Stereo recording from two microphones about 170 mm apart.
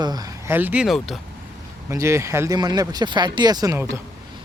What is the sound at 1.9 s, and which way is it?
Speech, 15° right (ahead or behind).